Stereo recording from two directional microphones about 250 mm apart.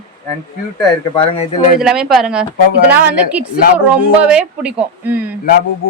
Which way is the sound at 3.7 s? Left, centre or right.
Centre.